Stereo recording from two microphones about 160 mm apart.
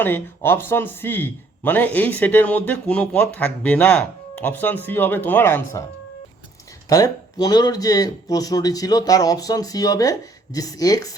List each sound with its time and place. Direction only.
0.0 s a man's voice: 15° left (ahead or behind)
6.8 s speech: 20° left (ahead or behind)